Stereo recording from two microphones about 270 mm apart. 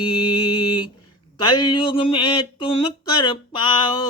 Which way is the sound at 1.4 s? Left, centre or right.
Centre.